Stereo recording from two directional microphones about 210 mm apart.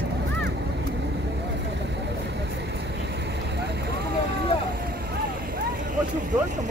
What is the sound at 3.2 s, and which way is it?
Vehicle, 55° right (ahead or behind).